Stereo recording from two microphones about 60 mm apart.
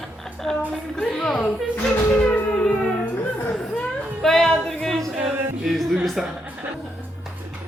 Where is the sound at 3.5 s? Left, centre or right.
Centre.